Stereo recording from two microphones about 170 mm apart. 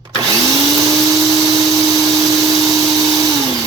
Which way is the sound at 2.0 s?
20° right (ahead or behind).